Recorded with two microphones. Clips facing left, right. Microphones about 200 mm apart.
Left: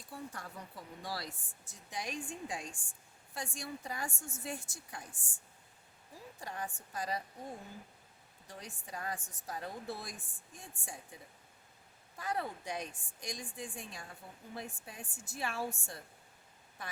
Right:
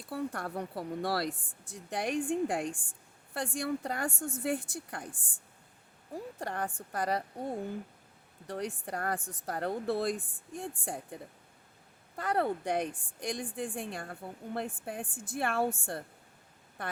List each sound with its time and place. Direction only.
0.1 s a woman's voice: 65° right (ahead or behind)